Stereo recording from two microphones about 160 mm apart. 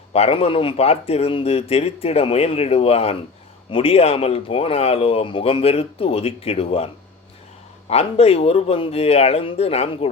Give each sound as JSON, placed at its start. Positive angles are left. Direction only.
{"t": 0.1, "sound": "speech", "side_deg": 40}